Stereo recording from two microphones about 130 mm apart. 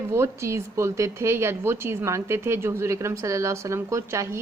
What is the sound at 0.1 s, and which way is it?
Speech, 20° right (ahead or behind).